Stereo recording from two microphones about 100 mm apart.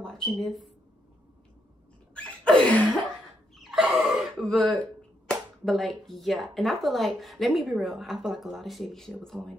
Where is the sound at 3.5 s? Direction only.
5° right (ahead or behind).